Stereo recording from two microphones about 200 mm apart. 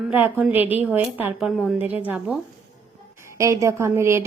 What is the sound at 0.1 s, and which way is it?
A woman's voice, 10° right (ahead or behind).